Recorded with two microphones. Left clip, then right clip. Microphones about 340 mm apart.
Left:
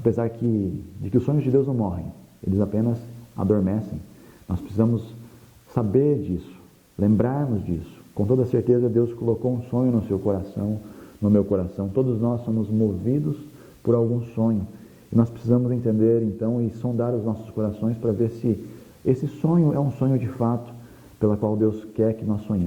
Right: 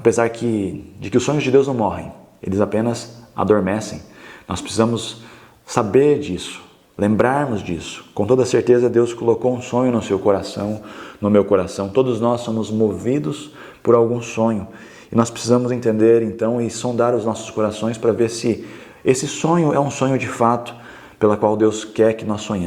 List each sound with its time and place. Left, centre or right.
0.0 s speech: centre